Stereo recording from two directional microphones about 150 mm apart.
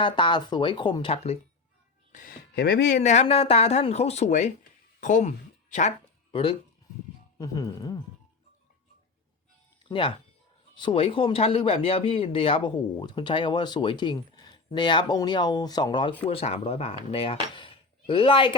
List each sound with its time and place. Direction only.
0.0 s speech: 35° left (ahead or behind)
2.1 s speech: 80° left; by 5.9 s 50° left (ahead or behind)
6.3 s speech: 40° left (ahead or behind)
7.3 s speech: 25° left (ahead or behind)
9.9 s speech: 35° left (ahead or behind)